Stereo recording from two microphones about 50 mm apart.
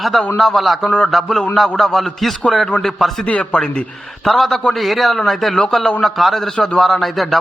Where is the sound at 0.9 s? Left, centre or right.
Centre.